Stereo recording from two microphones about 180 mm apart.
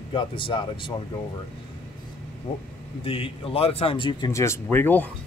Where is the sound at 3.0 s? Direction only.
30° left (ahead or behind).